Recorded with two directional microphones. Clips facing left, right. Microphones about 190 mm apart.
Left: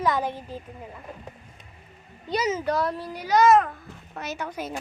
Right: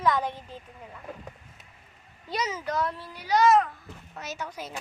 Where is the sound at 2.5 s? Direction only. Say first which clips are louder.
Left 5 dB; 30° left (ahead or behind); by 4.7 s 55° left (ahead or behind).